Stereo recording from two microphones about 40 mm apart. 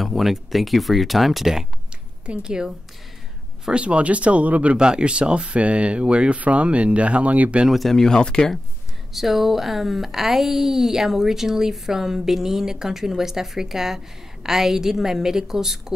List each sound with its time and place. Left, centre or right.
0.0 s speech: centre
2.2 s speech: right
3.7 s speech: right
7.9 s speech: centre
9.1 s speech: centre